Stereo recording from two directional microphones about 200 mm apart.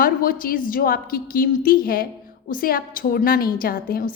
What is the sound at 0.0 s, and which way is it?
A woman's voice, 45° left (ahead or behind).